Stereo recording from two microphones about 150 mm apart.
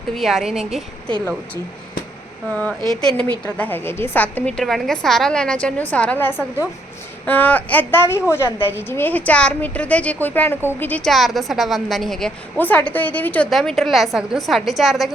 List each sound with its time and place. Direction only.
0.1 s a woman's voice: centre (ahead or behind)
2.5 s a woman's voice: 10° left (ahead or behind)